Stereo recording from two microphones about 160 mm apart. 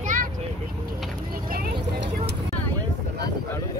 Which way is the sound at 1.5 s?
70° right (ahead or behind).